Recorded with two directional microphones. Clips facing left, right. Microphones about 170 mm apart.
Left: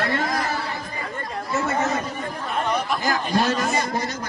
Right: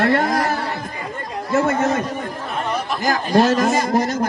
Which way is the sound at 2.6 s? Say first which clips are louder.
Even; centre (ahead or behind).